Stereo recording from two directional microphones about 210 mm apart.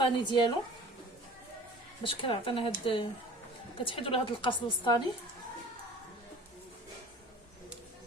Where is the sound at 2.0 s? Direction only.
25° left (ahead or behind).